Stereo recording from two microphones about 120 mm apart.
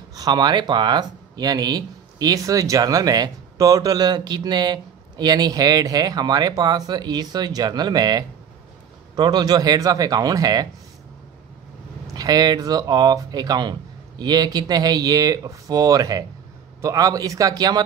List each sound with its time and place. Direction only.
0.1 s speech: 35° right (ahead or behind)
12.2 s speech: 35° right (ahead or behind)